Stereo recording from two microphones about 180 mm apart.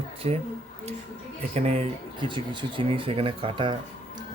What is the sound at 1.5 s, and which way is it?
Speech, 35° right (ahead or behind).